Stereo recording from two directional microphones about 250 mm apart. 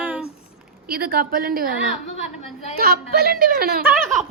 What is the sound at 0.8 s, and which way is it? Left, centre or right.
Speech, right.